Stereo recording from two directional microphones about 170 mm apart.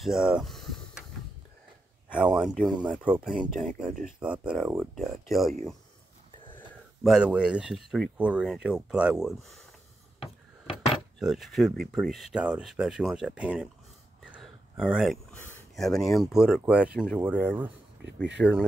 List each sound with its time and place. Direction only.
0.0 s speech: 5° right (ahead or behind)
2.1 s speech: 5° right (ahead or behind)
7.0 s speech: 5° right (ahead or behind)
10.2 s a sound: 35° left (ahead or behind)
11.1 s speech: centre (ahead or behind)
14.4 s a sound: centre (ahead or behind)
15.3 s a sound: 10° left (ahead or behind)
15.7 s speech: centre (ahead or behind)
18.0 s speech: 90° right